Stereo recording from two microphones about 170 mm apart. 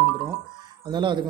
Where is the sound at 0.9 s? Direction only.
25° right (ahead or behind).